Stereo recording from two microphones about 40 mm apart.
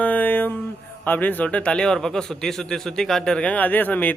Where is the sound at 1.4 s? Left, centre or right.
Left.